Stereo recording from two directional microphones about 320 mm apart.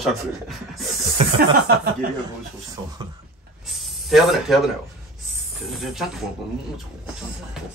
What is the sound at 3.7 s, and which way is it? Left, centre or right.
Snake, centre.